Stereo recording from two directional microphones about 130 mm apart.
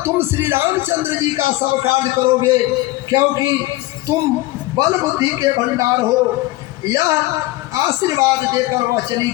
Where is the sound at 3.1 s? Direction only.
25° right (ahead or behind).